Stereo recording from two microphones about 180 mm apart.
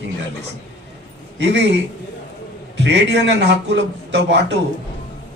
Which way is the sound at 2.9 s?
75° right (ahead or behind).